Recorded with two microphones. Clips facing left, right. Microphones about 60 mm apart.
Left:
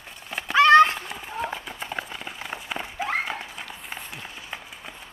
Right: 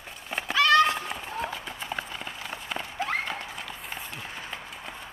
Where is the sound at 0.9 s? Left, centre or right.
Centre.